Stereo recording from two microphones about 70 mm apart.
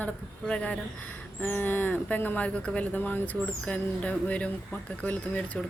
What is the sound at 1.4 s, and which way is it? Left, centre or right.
Speech, left.